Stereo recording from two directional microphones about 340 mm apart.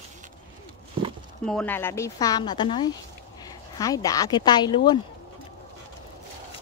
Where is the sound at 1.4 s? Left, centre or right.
Centre.